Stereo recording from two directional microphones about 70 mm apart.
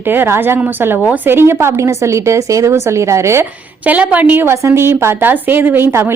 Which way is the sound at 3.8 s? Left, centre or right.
Right.